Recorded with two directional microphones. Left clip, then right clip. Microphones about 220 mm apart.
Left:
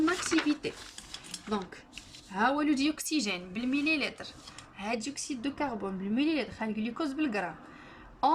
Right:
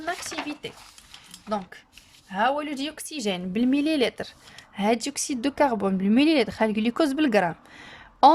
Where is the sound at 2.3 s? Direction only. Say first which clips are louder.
Right 3 dB; 40° right (ahead or behind).